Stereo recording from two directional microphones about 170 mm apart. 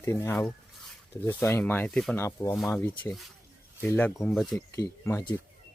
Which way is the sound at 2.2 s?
15° left (ahead or behind).